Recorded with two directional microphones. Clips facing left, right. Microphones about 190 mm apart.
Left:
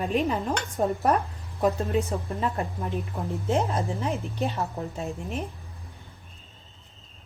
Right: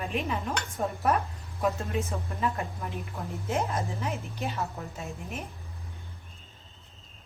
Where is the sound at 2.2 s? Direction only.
30° left (ahead or behind).